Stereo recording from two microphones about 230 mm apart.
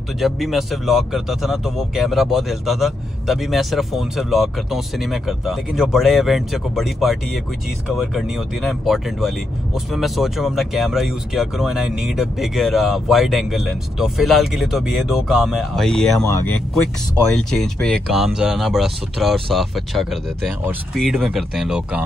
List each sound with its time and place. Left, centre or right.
0.2 s speech: centre
17.3 s speech: centre